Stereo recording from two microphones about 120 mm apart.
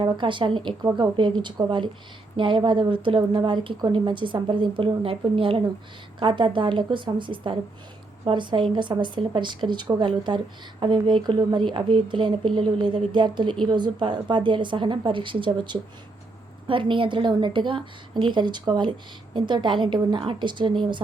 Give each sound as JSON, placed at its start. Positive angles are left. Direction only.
{"t": 0.0, "sound": "a woman's voice", "side_deg": -40}